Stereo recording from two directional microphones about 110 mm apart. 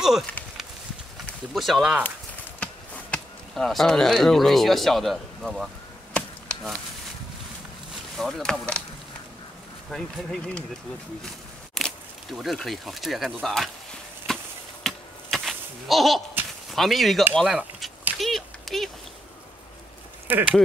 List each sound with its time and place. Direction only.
1.5 s speech: centre (ahead or behind)
2.6 s speech: 10° left (ahead or behind)
6.1 s chop: 10° left (ahead or behind)
8.2 s speech: centre (ahead or behind)
9.8 s speech: 5° left (ahead or behind)
11.7 s speech: centre (ahead or behind)
14.2 s a sound: 5° left (ahead or behind)
16.7 s speech: centre (ahead or behind)
18.1 s a sound: centre (ahead or behind)
20.3 s speech: 15° right (ahead or behind)